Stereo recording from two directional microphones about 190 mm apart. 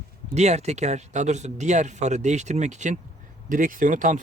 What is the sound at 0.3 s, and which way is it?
Speech, 35° right (ahead or behind).